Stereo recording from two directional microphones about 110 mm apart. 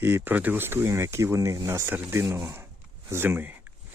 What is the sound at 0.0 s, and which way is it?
Speech, 15° right (ahead or behind).